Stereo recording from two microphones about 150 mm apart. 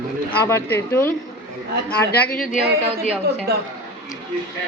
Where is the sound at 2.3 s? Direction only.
70° left (ahead or behind).